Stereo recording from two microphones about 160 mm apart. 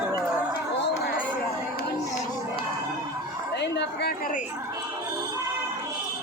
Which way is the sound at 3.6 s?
90° left.